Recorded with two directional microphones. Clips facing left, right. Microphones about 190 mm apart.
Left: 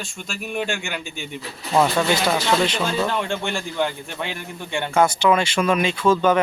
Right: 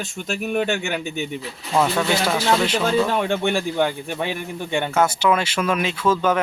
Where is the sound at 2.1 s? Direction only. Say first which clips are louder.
Even; 10° right (ahead or behind).